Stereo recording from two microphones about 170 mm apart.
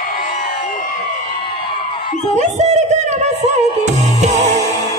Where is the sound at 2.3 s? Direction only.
40° right (ahead or behind).